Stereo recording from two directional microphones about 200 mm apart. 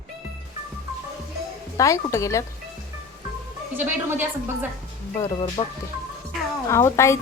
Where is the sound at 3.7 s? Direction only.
10° right (ahead or behind).